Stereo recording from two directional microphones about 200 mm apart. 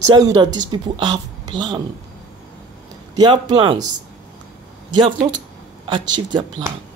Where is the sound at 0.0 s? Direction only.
20° right (ahead or behind).